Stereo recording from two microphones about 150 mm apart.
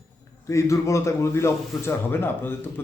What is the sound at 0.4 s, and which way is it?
A man's voice, 20° left (ahead or behind).